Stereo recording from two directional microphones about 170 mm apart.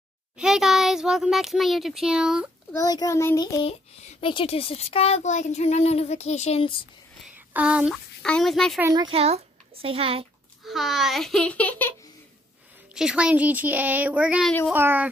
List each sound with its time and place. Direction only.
0.4 s speech: 5° right (ahead or behind)
2.7 s a child's voice: 20° left (ahead or behind)
4.2 s speech: 30° left (ahead or behind)
7.3 s a child's voice: 10° right (ahead or behind)
8.9 s a child's voice: 30° right (ahead or behind)
10.7 s speech: centre (ahead or behind)
12.9 s speech: 5° right (ahead or behind)